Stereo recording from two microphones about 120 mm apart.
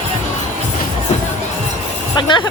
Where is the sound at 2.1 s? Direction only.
40° left (ahead or behind).